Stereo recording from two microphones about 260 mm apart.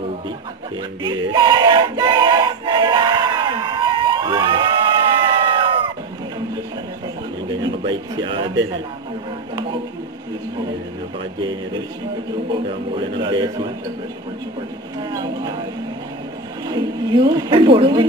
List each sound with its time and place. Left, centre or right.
1.0 s music: centre
7.6 s speech: centre
12.4 s speech: centre
15.0 s speech: centre
16.6 s speech: centre